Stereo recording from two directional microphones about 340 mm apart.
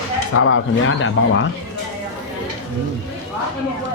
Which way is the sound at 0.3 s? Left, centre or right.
Left.